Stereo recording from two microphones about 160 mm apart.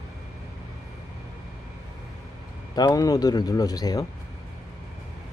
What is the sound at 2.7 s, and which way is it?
Speech, 25° left (ahead or behind).